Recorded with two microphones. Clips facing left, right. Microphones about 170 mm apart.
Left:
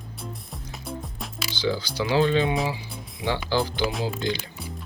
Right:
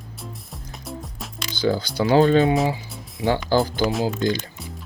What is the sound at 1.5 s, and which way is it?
Speech, 50° right (ahead or behind).